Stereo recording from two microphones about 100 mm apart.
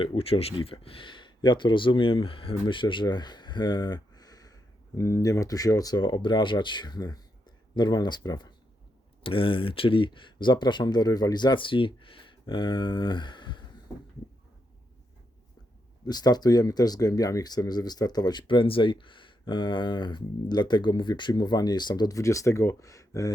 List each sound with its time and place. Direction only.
0.0 s speech: 70° left (ahead or behind); by 6.0 s 40° left (ahead or behind)
6.0 s speech: 50° left (ahead or behind)
9.2 s speech: 65° left (ahead or behind)
16.0 s speech: 45° left (ahead or behind)